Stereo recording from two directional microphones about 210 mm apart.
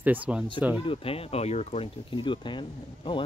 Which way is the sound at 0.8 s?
25° left (ahead or behind).